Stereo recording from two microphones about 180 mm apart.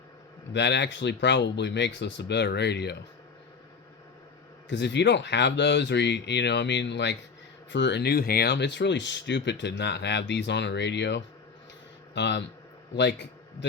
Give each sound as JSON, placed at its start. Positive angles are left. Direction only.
{"t": 0.5, "sound": "speech", "side_deg": 75}
{"t": 4.7, "sound": "a man's voice", "side_deg": 75}